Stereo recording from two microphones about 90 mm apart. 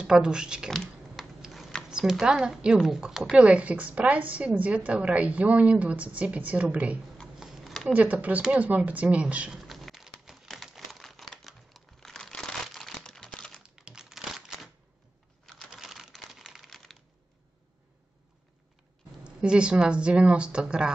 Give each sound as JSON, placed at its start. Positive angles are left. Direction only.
{"t": 0.0, "sound": "a woman's voice", "side_deg": -10}
{"t": 0.7, "sound": "a sound", "side_deg": 0}
{"t": 1.9, "sound": "a woman's voice", "side_deg": -5}
{"t": 7.3, "sound": "a sound", "side_deg": -5}
{"t": 7.9, "sound": "a woman's voice", "side_deg": -15}
{"t": 9.6, "sound": "a sound", "side_deg": 0}
{"t": 13.6, "sound": "crumpling", "side_deg": -10}
{"t": 15.4, "sound": "computer keyboard", "side_deg": 5}
{"t": 15.8, "sound": "typing", "side_deg": 0}
{"t": 19.2, "sound": "a woman's voice", "side_deg": -10}